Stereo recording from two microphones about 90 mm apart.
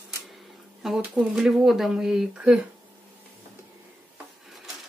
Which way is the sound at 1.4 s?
5° right (ahead or behind).